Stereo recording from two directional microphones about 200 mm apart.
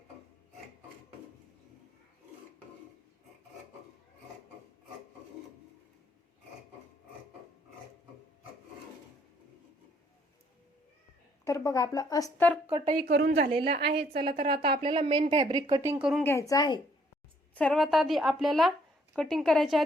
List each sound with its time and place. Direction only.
11.4 s a woman's voice: 15° left (ahead or behind)
12.7 s speech: 30° right (ahead or behind)
13.0 s a woman's voice: 55° right (ahead or behind)
14.4 s speech: 25° right (ahead or behind)
15.7 s speech: 10° right (ahead or behind)
16.2 s a woman's voice: 15° left (ahead or behind)
17.5 s a woman's voice: 5° left (ahead or behind)